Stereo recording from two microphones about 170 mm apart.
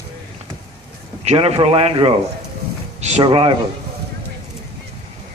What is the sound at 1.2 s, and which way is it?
A man's voice, 40° right (ahead or behind).